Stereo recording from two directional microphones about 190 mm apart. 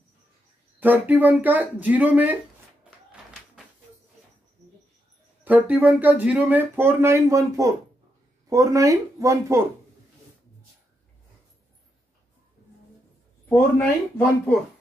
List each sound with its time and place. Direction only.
0.7 s speech: 10° right (ahead or behind)
2.8 s tap: 5° right (ahead or behind)
5.4 s speech: 10° right (ahead or behind)
13.5 s speech: 5° left (ahead or behind)